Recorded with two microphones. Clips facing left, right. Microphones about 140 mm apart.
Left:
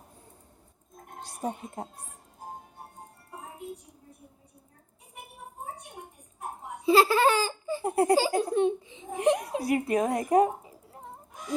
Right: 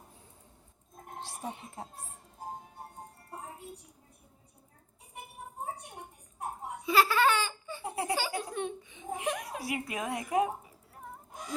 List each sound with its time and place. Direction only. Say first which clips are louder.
1.4 s a woman's voice: left 9 dB; 45° left (ahead or behind)
6.8 s laughter: left 5 dB; 30° left (ahead or behind)
7.9 s a woman's voice: left 10 dB; 50° left (ahead or behind)
8.1 s speech: left 9 dB; 35° left (ahead or behind)
9.6 s speech: left 10 dB; 45° left (ahead or behind)
10.6 s a sound: left 3 dB; 25° left (ahead or behind)